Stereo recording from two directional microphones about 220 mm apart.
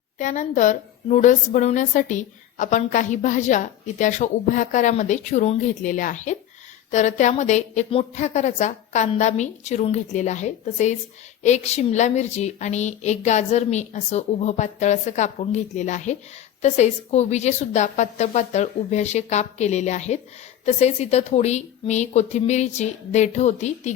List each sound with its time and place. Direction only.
0.2 s a woman's voice: 35° left (ahead or behind)